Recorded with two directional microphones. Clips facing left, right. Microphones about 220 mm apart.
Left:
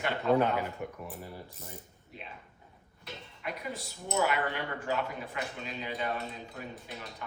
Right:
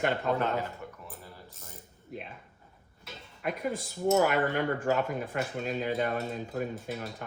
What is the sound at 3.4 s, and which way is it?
Speech, 50° right (ahead or behind).